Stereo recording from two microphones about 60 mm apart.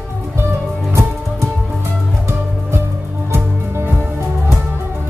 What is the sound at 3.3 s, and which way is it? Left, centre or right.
Music, right.